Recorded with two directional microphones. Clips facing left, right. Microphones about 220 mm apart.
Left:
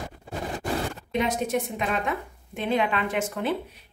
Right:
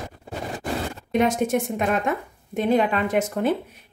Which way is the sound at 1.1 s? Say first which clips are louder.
Right 6 dB; 50° right (ahead or behind).